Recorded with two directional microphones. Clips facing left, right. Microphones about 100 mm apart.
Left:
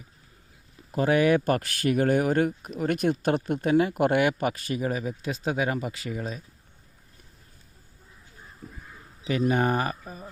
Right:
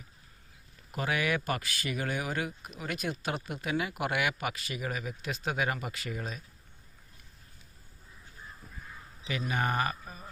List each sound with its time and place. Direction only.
0.9 s speech: 35° left (ahead or behind)
1.6 s speech: 55° left (ahead or behind); by 6.4 s 20° left (ahead or behind)
9.6 s speech: 25° left (ahead or behind)